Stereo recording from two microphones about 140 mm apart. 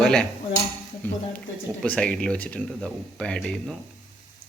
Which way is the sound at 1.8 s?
5° left (ahead or behind).